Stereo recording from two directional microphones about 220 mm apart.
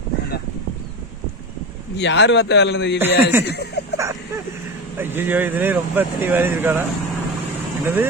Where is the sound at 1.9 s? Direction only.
50° left (ahead or behind).